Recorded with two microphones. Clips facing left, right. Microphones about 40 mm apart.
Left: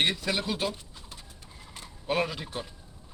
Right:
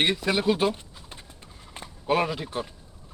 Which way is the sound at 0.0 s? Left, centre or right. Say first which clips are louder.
Right 5 dB; centre.